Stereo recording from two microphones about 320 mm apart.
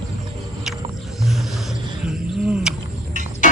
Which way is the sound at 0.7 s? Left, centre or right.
Centre.